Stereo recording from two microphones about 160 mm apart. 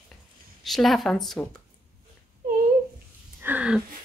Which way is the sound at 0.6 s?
Centre (ahead or behind).